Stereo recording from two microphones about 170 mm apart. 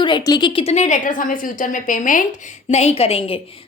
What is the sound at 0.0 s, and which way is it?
A woman's voice, 25° left (ahead or behind).